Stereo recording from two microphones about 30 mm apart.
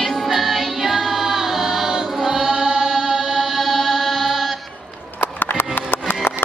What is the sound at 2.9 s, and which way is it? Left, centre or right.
Mantra, right.